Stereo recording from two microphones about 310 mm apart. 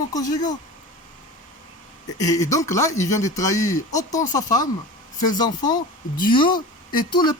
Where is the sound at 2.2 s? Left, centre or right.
Centre.